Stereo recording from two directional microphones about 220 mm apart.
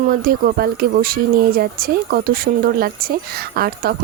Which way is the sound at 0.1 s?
45° right (ahead or behind).